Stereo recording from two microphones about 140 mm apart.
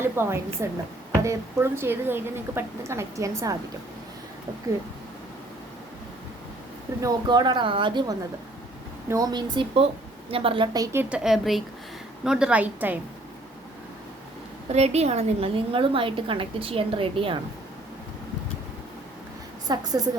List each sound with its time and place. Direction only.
0.0 s a woman's voice: 15° right (ahead or behind)
7.0 s a woman's voice: 30° right (ahead or behind)
10.8 s a woman's voice: 25° right (ahead or behind)
11.1 s a woman's voice: 5° right (ahead or behind)
14.7 s a woman's voice: 50° right (ahead or behind)
19.6 s a woman's voice: 25° right (ahead or behind)